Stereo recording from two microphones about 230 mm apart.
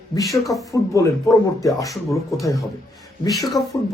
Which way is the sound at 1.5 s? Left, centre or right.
Centre.